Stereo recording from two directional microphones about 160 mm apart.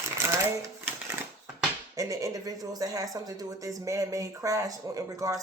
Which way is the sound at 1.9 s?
20° right (ahead or behind).